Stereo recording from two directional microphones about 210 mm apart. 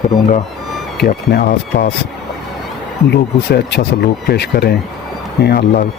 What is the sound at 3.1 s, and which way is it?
Speech, 50° left (ahead or behind).